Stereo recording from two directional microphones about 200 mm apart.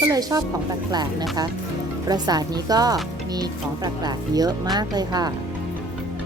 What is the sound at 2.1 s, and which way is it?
Speech, 20° right (ahead or behind).